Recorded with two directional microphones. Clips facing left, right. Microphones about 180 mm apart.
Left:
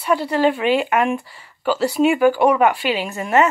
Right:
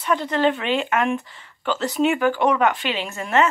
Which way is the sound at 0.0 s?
10° left (ahead or behind).